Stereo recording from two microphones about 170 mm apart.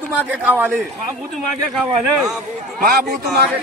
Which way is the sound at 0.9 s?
Centre (ahead or behind).